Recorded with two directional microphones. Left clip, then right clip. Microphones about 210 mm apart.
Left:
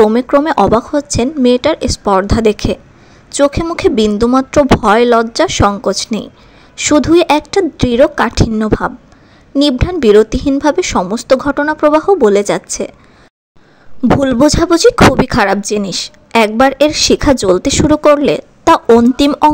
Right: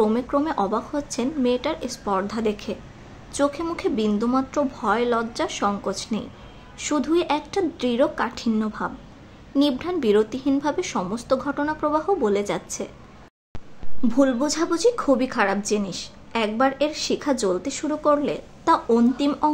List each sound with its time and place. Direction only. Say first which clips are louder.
0.0 s a woman's voice: left 13 dB; 35° left (ahead or behind)
14.2 s speech: left 9 dB; 40° left (ahead or behind)